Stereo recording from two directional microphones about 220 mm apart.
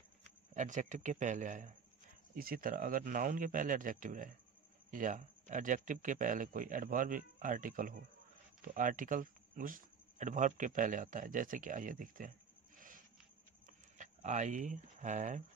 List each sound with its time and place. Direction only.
0.6 s speech: 35° right (ahead or behind)
13.9 s speech: 35° right (ahead or behind)